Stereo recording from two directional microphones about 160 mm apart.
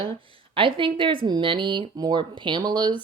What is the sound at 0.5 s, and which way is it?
Speech, 30° right (ahead or behind).